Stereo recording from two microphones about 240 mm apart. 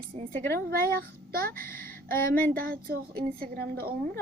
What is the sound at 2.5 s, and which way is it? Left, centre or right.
A woman's voice, right.